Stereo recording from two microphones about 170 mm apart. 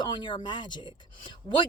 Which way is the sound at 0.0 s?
25° left (ahead or behind).